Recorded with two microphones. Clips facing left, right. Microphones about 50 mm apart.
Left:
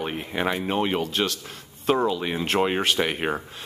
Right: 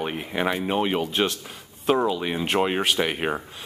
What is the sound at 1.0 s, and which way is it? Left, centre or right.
Speech, centre.